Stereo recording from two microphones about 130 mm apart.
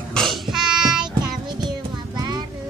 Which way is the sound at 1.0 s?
35° right (ahead or behind).